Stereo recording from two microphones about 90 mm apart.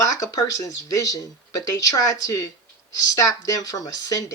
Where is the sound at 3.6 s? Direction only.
45° left (ahead or behind).